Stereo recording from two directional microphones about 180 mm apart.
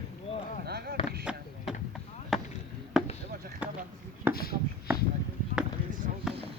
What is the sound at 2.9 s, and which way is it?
Basketball bounce, 5° right (ahead or behind).